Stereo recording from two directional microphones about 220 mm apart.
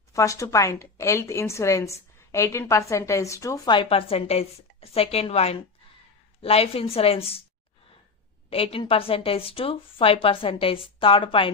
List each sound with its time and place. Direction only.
0.1 s a woman's voice: 15° left (ahead or behind)
8.5 s a woman's voice: 25° left (ahead or behind)